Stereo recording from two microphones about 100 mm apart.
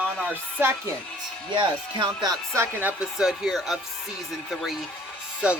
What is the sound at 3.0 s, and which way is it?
Speech, 5° right (ahead or behind).